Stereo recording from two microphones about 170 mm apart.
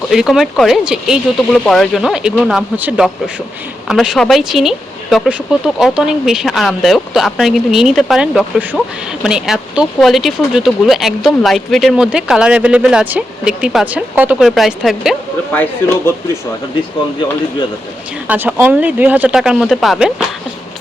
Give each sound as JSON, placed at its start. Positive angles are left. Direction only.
{"t": 0.1, "sound": "speech", "side_deg": 0}
{"t": 18.3, "sound": "speech", "side_deg": -10}